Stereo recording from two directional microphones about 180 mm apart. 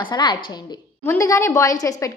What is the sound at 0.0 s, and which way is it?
A woman's voice, 25° left (ahead or behind).